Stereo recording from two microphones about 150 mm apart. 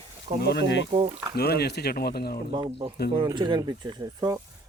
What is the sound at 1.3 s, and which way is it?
Speech, 90° left.